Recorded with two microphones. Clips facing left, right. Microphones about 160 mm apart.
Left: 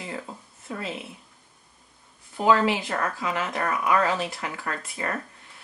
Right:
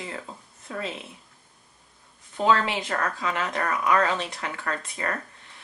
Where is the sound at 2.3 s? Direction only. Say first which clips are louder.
Left 2 dB; 5° left (ahead or behind).